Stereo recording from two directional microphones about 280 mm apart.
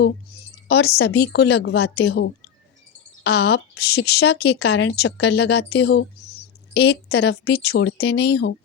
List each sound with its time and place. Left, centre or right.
0.7 s a woman's voice: left